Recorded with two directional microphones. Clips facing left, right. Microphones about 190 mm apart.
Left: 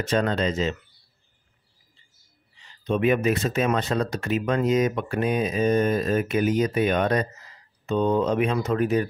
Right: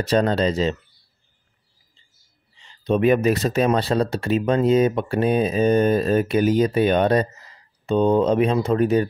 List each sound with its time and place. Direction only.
0.0 s speech: 35° right (ahead or behind)
2.6 s speech: 35° right (ahead or behind)